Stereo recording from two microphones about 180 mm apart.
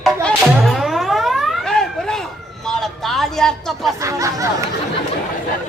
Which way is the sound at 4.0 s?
20° right (ahead or behind).